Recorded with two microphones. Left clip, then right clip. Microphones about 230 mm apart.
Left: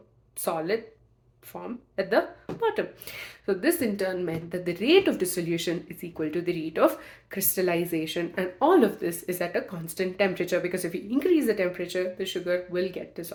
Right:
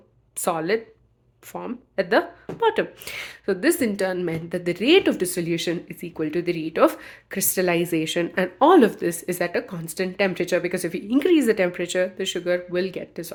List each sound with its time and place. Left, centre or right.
0.4 s speech: right